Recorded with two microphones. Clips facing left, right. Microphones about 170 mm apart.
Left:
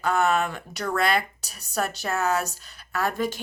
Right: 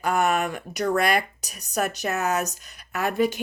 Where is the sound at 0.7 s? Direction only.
70° right (ahead or behind).